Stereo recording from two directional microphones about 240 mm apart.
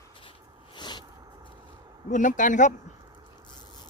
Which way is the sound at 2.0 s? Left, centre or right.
Left.